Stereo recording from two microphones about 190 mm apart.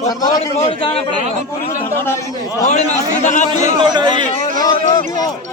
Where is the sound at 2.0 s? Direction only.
15° left (ahead or behind).